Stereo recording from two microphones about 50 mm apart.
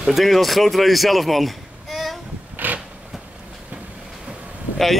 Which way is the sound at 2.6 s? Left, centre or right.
Right.